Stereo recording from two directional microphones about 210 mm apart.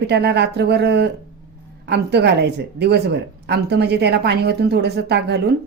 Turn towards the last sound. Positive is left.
turn(degrees=-50)  # may be behind; listen again after turning